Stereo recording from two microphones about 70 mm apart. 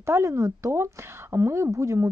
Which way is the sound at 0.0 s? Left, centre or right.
Right.